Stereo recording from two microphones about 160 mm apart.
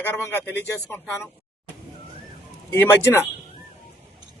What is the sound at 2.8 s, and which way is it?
Speech, 15° left (ahead or behind).